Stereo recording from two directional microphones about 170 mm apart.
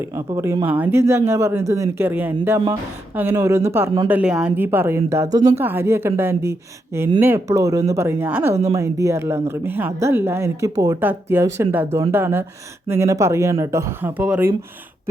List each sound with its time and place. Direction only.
0.3 s a woman's voice: 20° right (ahead or behind)